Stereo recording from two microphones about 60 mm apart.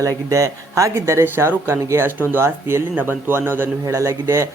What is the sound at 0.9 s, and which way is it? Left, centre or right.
A man's voice, right.